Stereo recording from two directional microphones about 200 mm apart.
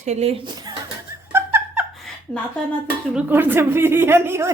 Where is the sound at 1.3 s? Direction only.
10° right (ahead or behind).